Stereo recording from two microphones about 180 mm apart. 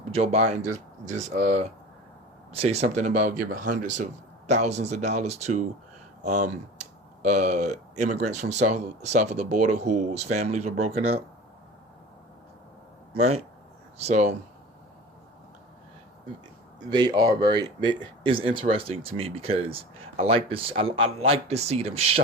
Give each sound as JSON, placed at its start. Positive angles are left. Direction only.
{"t": 0.0, "sound": "speech", "side_deg": -35}
{"t": 2.5, "sound": "speech", "side_deg": -35}
{"t": 13.1, "sound": "speech", "side_deg": -35}
{"t": 16.8, "sound": "speech", "side_deg": -20}